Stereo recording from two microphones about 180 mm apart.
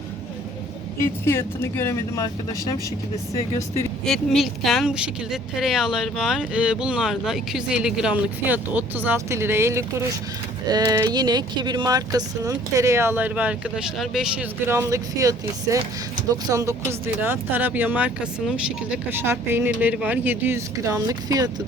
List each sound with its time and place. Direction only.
1.0 s speech: 15° left (ahead or behind)
4.0 s speech: centre (ahead or behind)
14.7 s speech: 15° right (ahead or behind)